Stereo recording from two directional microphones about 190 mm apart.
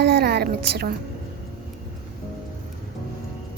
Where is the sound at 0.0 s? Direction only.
60° right (ahead or behind).